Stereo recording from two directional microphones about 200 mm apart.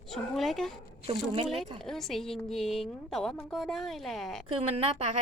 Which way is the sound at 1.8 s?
Centre (ahead or behind).